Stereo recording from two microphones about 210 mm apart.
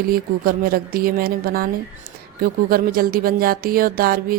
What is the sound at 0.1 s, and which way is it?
Speech, 45° right (ahead or behind).